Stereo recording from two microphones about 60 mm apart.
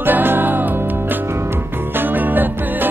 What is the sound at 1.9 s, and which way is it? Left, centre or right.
Music, right.